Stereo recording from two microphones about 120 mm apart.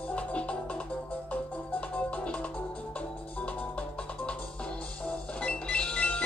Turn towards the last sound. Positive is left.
turn(degrees=10)  # may be behind; listen again after turning